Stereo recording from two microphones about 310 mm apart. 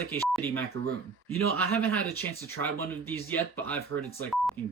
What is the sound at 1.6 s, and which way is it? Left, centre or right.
Speech, centre.